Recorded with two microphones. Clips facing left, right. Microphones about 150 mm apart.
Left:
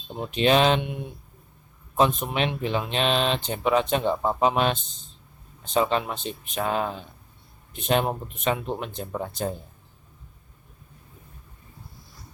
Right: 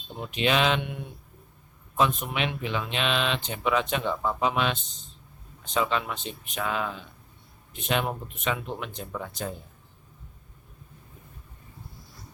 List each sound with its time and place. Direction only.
0.2 s speech: 30° left (ahead or behind)
0.8 s speech: 20° left (ahead or behind)
2.0 s speech: 35° left (ahead or behind)